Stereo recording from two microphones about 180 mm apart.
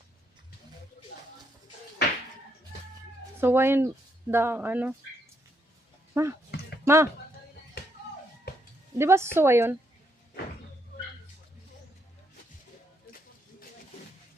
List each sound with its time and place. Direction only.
3.4 s speech: 15° right (ahead or behind)
6.2 s speech: 15° right (ahead or behind)
9.0 s speech: 15° right (ahead or behind)
13.1 s a sound: 55° left (ahead or behind)